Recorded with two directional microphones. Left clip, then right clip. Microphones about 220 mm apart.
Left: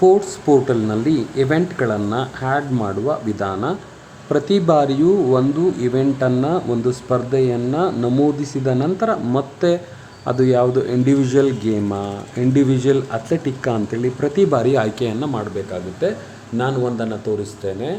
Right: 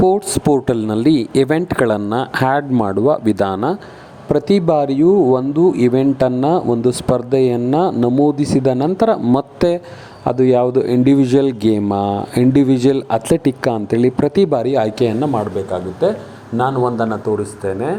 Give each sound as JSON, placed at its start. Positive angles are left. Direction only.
{"t": 0.0, "sound": "speech", "side_deg": -30}
{"t": 4.3, "sound": "a man's voice", "side_deg": -25}
{"t": 16.6, "sound": "a man's voice", "side_deg": -10}